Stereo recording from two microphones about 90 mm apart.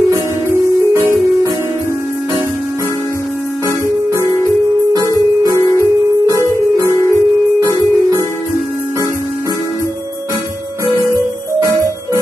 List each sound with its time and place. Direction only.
0.1 s music: 30° right (ahead or behind)
5.8 s music: 35° right (ahead or behind)